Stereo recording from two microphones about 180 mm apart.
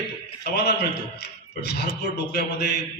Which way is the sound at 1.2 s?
65° left (ahead or behind).